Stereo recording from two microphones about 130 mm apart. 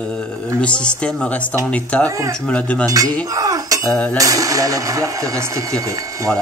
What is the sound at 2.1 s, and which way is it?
Speech, 25° right (ahead or behind).